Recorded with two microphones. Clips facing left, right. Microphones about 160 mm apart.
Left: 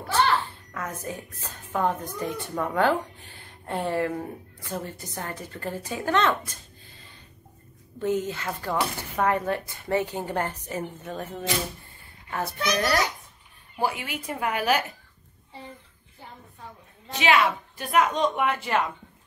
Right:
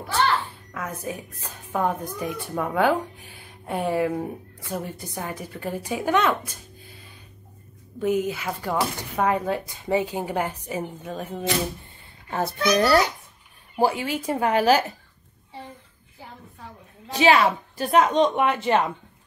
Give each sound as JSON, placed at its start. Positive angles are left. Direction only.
{"t": 0.5, "sound": "a woman's voice", "side_deg": -10}
{"t": 12.3, "sound": "a woman's voice", "side_deg": -30}
{"t": 17.1, "sound": "a woman's voice", "side_deg": -35}